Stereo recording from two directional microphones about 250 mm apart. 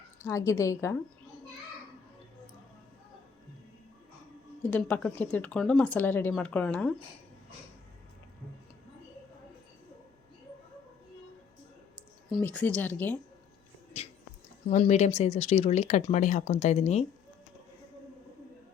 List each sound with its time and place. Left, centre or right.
0.2 s speech: centre
4.7 s speech: centre
12.3 s speech: centre
14.0 s a sound: left
14.7 s speech: left